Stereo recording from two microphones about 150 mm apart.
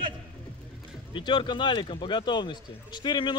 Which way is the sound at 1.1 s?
30° left (ahead or behind).